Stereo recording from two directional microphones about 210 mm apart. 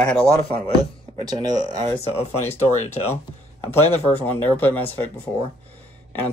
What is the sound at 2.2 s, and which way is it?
Speech, 30° left (ahead or behind).